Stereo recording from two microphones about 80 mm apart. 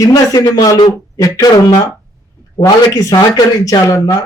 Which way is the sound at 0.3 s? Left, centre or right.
Left.